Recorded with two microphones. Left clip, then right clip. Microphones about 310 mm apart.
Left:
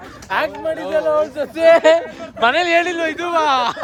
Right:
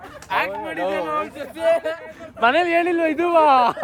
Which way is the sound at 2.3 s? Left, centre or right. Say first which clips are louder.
Left 3 dB; centre.